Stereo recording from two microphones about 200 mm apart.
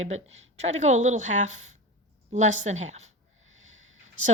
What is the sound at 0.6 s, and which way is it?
Speech, 35° right (ahead or behind).